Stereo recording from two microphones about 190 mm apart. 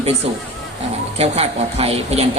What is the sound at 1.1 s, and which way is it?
A man's voice, 35° right (ahead or behind).